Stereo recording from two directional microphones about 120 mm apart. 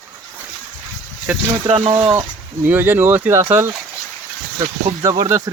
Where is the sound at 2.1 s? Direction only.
20° right (ahead or behind).